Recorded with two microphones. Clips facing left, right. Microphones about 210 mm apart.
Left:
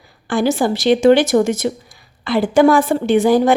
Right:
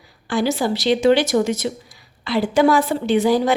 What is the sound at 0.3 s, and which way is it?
A woman's voice, 50° left (ahead or behind).